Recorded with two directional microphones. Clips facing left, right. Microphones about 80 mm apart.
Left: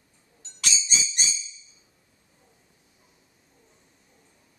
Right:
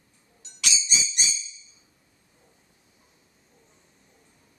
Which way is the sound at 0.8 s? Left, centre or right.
Left.